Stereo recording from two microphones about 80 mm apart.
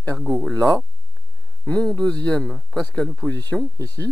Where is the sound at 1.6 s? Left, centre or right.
Centre.